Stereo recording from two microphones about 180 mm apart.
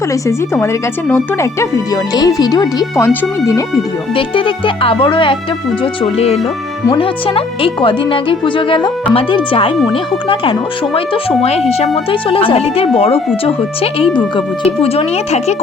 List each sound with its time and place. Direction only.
0.3 s speech: 15° left (ahead or behind)
4.1 s speech: 30° left (ahead or behind)